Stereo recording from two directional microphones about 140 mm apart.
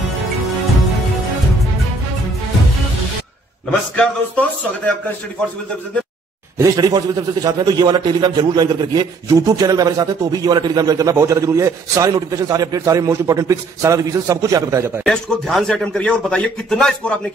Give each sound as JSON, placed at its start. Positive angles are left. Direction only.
{"t": 3.9, "sound": "speech", "side_deg": 10}
{"t": 6.6, "sound": "a man's voice", "side_deg": -25}
{"t": 15.0, "sound": "a man's voice", "side_deg": 0}